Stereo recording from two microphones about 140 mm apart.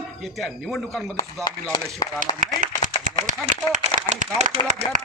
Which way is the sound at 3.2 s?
65° right (ahead or behind).